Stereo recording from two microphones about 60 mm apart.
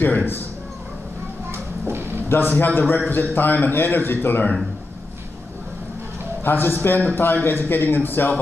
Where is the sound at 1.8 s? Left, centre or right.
Right.